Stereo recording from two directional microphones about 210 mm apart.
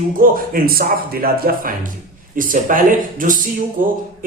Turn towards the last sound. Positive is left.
turn(degrees=-40)  # may be behind; listen again after turning